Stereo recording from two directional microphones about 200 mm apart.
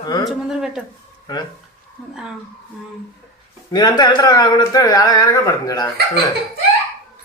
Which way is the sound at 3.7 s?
20° left (ahead or behind).